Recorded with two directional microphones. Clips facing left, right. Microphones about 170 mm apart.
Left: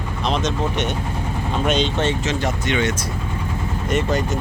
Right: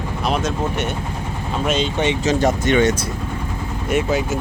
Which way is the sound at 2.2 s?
45° right (ahead or behind).